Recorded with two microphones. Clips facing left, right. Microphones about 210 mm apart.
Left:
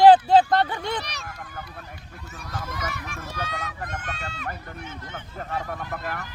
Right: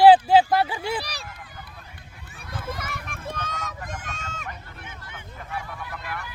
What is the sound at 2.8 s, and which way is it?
Run, 55° right (ahead or behind).